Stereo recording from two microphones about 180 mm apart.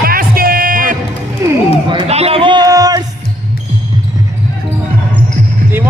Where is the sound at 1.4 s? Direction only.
15° right (ahead or behind).